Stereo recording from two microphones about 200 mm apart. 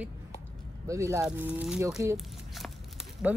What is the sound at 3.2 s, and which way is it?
Speech, 5° right (ahead or behind).